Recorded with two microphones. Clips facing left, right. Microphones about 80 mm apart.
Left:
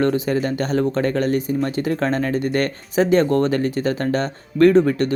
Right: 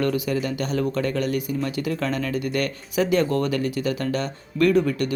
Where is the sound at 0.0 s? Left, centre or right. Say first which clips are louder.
Left 4 dB; left.